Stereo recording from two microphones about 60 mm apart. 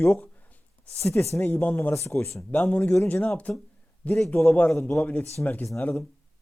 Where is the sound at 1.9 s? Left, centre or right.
Left.